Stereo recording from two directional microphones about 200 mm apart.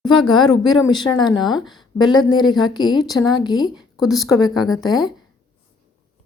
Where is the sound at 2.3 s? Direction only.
20° left (ahead or behind).